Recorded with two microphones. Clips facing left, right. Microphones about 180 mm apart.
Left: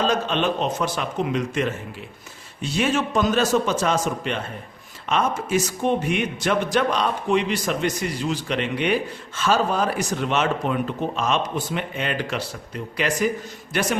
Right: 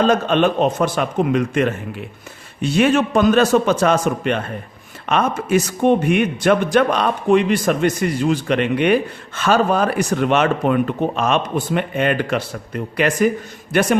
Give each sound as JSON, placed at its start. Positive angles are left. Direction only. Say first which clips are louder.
{"t": 0.0, "sound": "a man's voice", "louder": "right 6 dB", "side_deg": -55}